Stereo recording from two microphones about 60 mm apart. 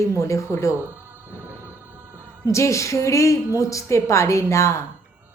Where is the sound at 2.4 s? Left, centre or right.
Left.